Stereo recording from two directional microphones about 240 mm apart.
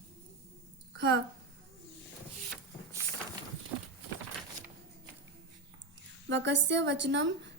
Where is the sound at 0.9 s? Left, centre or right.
Right.